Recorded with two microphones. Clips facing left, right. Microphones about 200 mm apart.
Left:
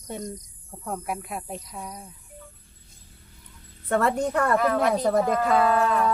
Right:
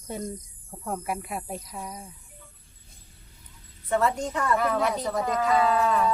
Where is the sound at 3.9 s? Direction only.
60° left (ahead or behind).